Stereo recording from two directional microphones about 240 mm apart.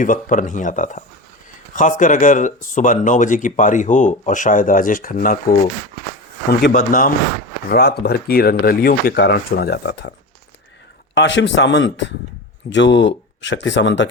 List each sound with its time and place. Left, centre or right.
0.0 s speech: left
11.1 s speech: left